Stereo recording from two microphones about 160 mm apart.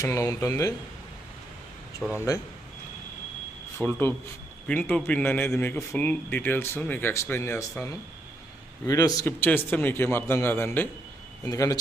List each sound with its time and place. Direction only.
0.0 s speech: 20° left (ahead or behind)
2.0 s speech: 5° right (ahead or behind)
3.8 s a man's voice: 10° left (ahead or behind)
8.9 s a man's voice: 25° left (ahead or behind)